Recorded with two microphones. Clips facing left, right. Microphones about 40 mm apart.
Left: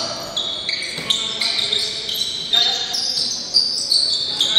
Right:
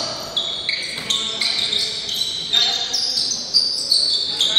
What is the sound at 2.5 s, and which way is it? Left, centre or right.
Basketball bounce, centre.